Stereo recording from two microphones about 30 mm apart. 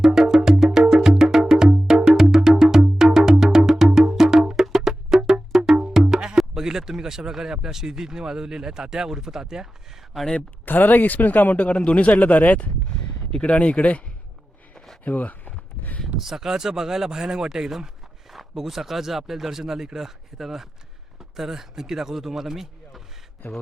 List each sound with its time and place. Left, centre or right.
0.0 s music: centre
1.2 s wood block: centre
2.0 s music: centre
6.3 s speech: centre
10.7 s speech: left
11.5 s speech: left
13.4 s speech: left
15.0 s a sound: left
16.1 s speech: centre
18.3 s speech: centre